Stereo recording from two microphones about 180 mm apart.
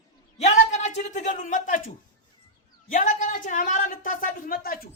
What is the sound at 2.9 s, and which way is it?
A man's voice, 45° left (ahead or behind).